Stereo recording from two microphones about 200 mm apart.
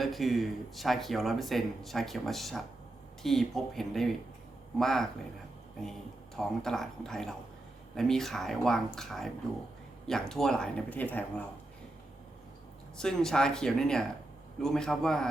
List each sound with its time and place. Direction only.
0.0 s speech: centre (ahead or behind)
6.3 s speech: centre (ahead or behind)
13.0 s speech: 5° left (ahead or behind)